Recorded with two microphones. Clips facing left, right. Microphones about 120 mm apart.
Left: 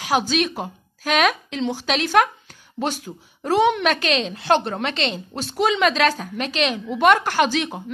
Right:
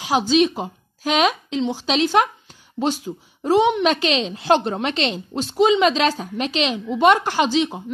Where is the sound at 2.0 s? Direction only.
25° right (ahead or behind).